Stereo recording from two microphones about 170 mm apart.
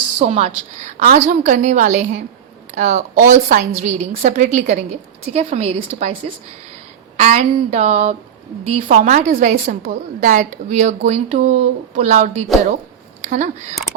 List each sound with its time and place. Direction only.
0.2 s speech: 40° right (ahead or behind)